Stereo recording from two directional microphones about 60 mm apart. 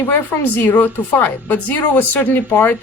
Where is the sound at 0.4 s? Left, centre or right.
Left.